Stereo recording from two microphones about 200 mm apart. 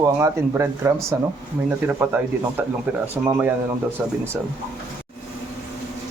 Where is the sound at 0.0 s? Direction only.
15° right (ahead or behind).